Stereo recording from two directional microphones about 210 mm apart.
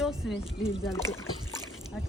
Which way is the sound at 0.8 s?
15° left (ahead or behind).